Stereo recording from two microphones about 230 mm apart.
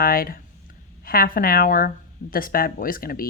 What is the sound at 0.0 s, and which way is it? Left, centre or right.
Speech, left.